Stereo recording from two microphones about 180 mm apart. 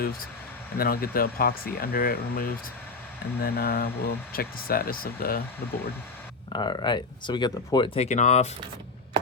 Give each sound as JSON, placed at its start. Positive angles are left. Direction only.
{"t": 0.8, "sound": "speech", "side_deg": 55}
{"t": 6.5, "sound": "speech", "side_deg": 25}
{"t": 7.9, "sound": "speech", "side_deg": 40}